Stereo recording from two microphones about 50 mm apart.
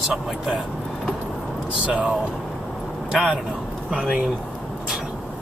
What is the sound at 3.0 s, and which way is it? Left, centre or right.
Speech, centre.